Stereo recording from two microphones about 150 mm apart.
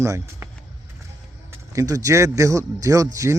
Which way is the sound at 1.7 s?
20° right (ahead or behind).